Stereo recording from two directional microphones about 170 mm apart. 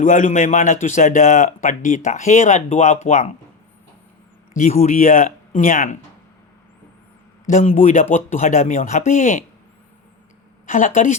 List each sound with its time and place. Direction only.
0.0 s a man's voice: 50° left (ahead or behind)
4.5 s a man's voice: 50° left (ahead or behind)
7.5 s a man's voice: 45° left (ahead or behind)
10.7 s a man's voice: 50° left (ahead or behind)